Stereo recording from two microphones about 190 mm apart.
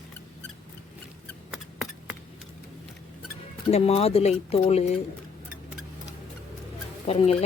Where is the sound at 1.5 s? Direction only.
Centre (ahead or behind).